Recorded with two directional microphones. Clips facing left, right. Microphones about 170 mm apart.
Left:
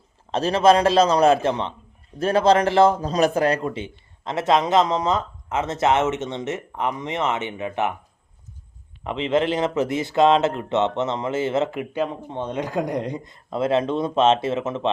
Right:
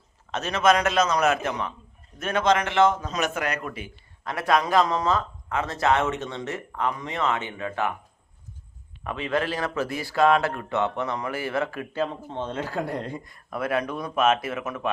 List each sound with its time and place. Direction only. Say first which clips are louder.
0.3 s a man's voice: left 5 dB; 30° left (ahead or behind)
9.0 s a man's voice: left 5 dB; 20° left (ahead or behind)